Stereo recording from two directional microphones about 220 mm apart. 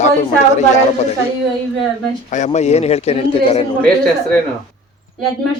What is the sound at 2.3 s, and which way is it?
A man's voice, 30° left (ahead or behind).